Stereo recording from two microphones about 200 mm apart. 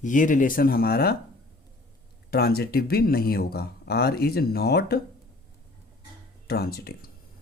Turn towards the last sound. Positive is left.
turn(degrees=50)  # may be behind; listen again after turning